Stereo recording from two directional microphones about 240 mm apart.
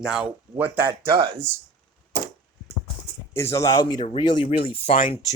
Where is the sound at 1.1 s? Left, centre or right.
Right.